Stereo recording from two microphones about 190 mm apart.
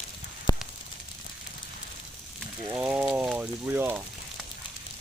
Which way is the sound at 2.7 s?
5° right (ahead or behind).